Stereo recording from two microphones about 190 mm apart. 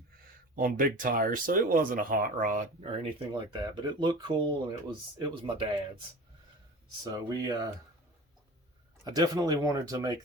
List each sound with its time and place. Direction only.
0.5 s speech: 45° right (ahead or behind)
2.8 s speech: 25° right (ahead or behind)
7.0 s speech: 20° right (ahead or behind)
9.0 s speech: 20° right (ahead or behind)